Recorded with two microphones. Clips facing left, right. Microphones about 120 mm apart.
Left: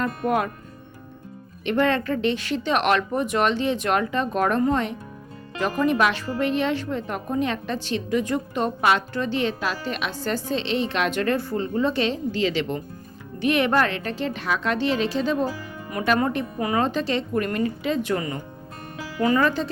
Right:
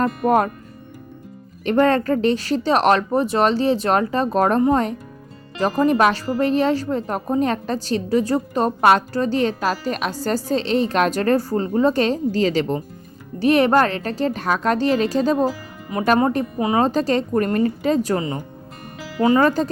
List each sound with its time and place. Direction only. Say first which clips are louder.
0.0 s speech: right 6 dB; 40° right (ahead or behind)
1.6 s speech: right 5 dB; 40° right (ahead or behind)
15.9 s speech: right 5 dB; 20° right (ahead or behind)
16.8 s speech: right 5 dB; 40° right (ahead or behind)
19.4 s speech: right 5 dB; 40° right (ahead or behind)